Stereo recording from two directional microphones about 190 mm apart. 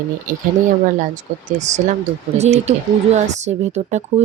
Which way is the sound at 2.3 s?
35° right (ahead or behind).